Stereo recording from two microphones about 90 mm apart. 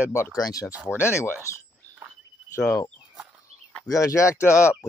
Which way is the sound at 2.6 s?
10° left (ahead or behind).